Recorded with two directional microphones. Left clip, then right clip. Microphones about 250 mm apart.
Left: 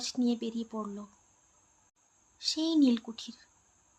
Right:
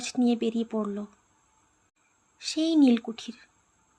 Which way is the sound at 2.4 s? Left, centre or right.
Centre.